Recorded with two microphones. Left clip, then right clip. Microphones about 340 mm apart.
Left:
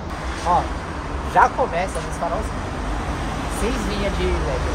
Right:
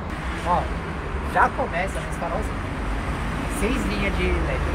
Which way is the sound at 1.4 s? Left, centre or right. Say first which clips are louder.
Left 4 dB; left.